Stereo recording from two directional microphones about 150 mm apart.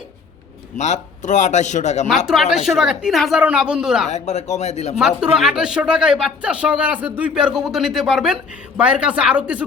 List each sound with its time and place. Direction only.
0.8 s a man's voice: 50° left (ahead or behind)
2.2 s speech: centre (ahead or behind)
4.1 s a man's voice: 50° left (ahead or behind)
4.9 s speech: 5° right (ahead or behind)